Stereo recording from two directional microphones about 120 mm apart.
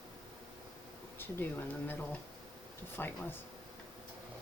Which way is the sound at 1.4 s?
15° left (ahead or behind).